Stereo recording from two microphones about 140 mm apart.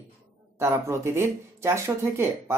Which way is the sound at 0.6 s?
20° right (ahead or behind).